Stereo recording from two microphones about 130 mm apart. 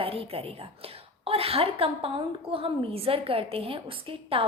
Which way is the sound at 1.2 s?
50° right (ahead or behind).